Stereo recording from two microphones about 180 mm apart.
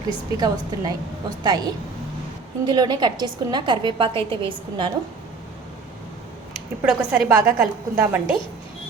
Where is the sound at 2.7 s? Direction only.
25° right (ahead or behind).